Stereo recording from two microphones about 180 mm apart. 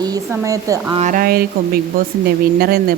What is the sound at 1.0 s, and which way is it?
Speech, 50° right (ahead or behind).